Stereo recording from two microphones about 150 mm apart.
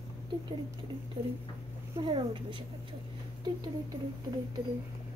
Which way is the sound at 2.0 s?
30° right (ahead or behind).